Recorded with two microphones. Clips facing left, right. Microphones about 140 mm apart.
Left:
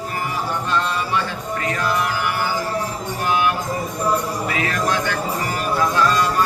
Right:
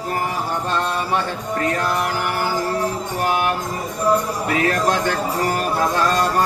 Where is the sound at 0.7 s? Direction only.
40° right (ahead or behind).